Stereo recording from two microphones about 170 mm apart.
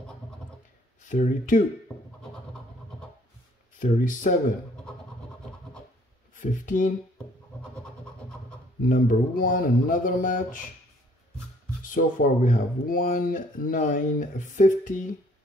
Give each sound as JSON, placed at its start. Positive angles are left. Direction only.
{"t": 1.0, "sound": "speech", "side_deg": 50}
{"t": 3.8, "sound": "speech", "side_deg": 50}
{"t": 6.3, "sound": "speech", "side_deg": 50}
{"t": 7.7, "sound": "vehicle", "side_deg": 5}
{"t": 8.8, "sound": "speech", "side_deg": 55}
{"t": 11.8, "sound": "speech", "side_deg": 50}